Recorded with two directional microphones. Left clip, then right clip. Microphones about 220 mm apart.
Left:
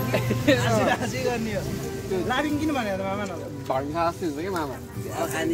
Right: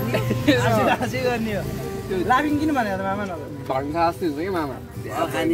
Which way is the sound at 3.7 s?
5° left (ahead or behind).